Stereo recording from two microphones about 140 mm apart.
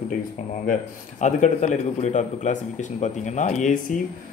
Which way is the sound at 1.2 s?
60° left (ahead or behind).